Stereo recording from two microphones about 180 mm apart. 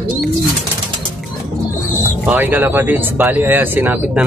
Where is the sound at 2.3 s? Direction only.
10° right (ahead or behind).